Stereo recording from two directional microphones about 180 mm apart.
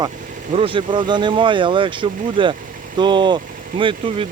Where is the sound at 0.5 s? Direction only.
30° right (ahead or behind).